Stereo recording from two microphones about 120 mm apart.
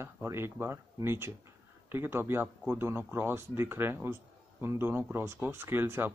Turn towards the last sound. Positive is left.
turn(degrees=-20)  # may be behind; listen again after turning